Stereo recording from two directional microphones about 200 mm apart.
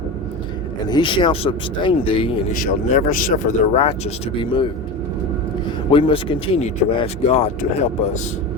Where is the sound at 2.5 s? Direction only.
40° left (ahead or behind).